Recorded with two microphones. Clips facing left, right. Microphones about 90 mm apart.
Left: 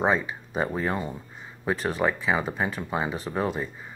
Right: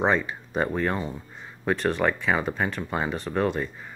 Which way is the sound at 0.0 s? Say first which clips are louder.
Right 1 dB; 5° left (ahead or behind).